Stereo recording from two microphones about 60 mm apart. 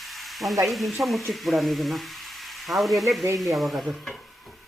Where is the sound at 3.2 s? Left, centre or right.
Right.